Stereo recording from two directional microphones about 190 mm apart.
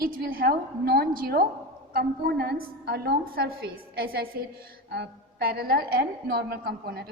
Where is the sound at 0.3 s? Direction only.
50° right (ahead or behind).